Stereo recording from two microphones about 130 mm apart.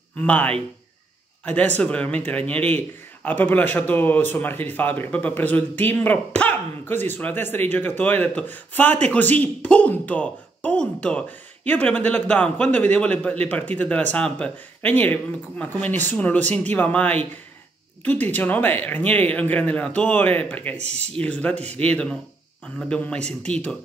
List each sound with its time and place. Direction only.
0.2 s speech: 10° left (ahead or behind)
20.9 s speech: 55° right (ahead or behind)
21.2 s speech: 10° left (ahead or behind)